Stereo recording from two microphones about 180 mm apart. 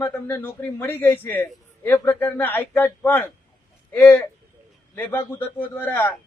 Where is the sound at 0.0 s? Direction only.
15° left (ahead or behind).